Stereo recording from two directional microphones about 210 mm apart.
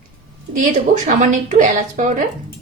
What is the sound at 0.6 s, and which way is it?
A woman's voice, 35° right (ahead or behind).